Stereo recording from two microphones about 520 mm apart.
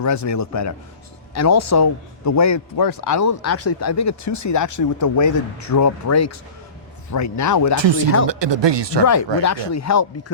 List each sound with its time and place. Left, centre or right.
0.0 s a man's voice: left
7.8 s speech: right
9.4 s speech: left